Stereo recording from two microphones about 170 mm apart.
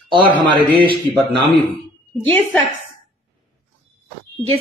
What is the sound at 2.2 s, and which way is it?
Speech, 10° left (ahead or behind).